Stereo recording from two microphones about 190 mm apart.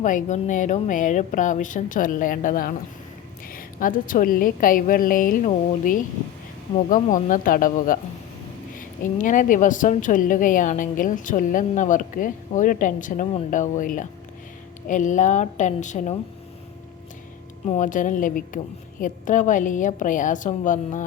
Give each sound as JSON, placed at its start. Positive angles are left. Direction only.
{"t": 0.0, "sound": "a woman's voice", "side_deg": 40}
{"t": 17.7, "sound": "a woman's voice", "side_deg": 40}